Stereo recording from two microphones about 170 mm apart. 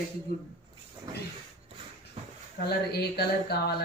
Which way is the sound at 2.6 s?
70° left (ahead or behind).